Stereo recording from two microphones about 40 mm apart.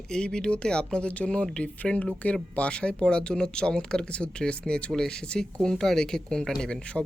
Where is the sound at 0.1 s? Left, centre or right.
Centre.